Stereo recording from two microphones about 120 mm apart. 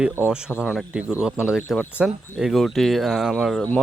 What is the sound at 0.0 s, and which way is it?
Speech, 10° right (ahead or behind).